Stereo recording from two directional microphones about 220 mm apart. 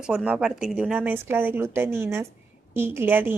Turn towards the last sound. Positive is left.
turn(degrees=-10)  # may be behind; listen again after turning